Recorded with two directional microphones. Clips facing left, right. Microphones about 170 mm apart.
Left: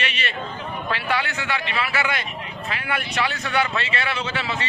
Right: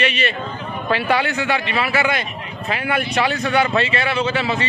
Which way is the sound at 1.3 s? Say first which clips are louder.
Right 6 dB; 15° right (ahead or behind).